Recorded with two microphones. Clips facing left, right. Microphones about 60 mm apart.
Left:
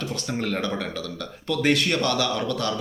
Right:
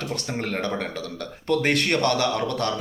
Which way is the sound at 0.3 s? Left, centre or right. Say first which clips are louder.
Left 3 dB; right.